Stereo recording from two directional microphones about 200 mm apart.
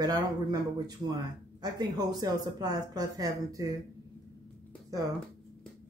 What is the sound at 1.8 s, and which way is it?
Speech, 20° right (ahead or behind).